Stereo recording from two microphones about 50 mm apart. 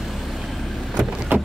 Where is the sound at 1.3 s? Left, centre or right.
Right.